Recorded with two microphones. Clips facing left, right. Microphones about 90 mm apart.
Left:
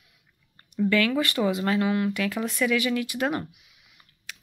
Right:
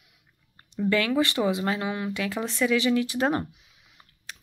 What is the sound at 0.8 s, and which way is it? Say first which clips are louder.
Speech: even; 20° right (ahead or behind).